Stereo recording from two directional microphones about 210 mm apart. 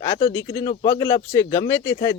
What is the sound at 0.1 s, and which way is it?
A man's voice, 20° left (ahead or behind).